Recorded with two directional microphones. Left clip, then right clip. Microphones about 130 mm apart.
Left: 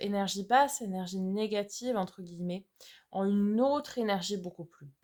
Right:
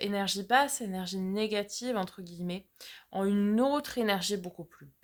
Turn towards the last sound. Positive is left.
turn(degrees=-30)  # may be behind; listen again after turning